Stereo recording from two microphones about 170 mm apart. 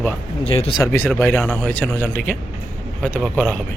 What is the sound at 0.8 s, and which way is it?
Speech, 15° left (ahead or behind).